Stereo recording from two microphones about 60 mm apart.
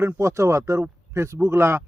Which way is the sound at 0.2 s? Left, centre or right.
Right.